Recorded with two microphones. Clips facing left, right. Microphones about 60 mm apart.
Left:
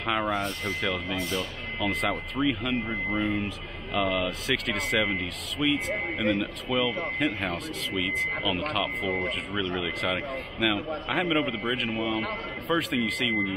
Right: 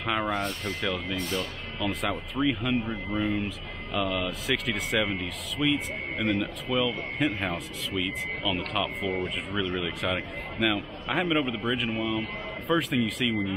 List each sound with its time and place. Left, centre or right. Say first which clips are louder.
0.0 s speech: left 1 dB; centre